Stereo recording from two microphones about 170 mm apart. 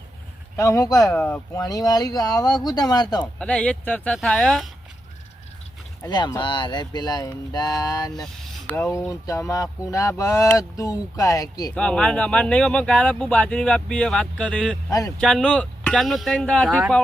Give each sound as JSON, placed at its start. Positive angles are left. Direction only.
{"t": 0.5, "sound": "speech", "side_deg": 20}
{"t": 1.0, "sound": "speech", "side_deg": 10}
{"t": 1.6, "sound": "speech", "side_deg": 20}
{"t": 3.3, "sound": "speech", "side_deg": 5}
{"t": 6.0, "sound": "speech", "side_deg": 25}
{"t": 8.1, "sound": "a sound", "side_deg": 0}
{"t": 8.7, "sound": "speech", "side_deg": 15}
{"t": 11.7, "sound": "speech", "side_deg": 5}
{"t": 14.8, "sound": "speech", "side_deg": 20}
{"t": 15.2, "sound": "speech", "side_deg": 5}